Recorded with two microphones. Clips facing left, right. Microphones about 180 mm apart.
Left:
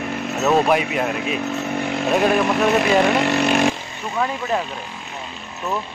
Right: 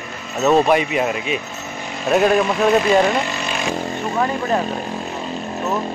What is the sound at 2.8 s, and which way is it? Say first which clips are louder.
Speech: right 1 dB; 65° left (ahead or behind).